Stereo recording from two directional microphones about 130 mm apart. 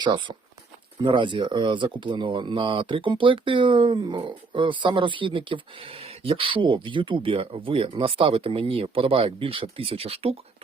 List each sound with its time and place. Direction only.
0.0 s speech: 35° right (ahead or behind)